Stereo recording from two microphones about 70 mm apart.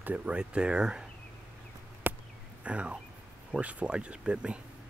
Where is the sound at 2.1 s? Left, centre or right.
Right.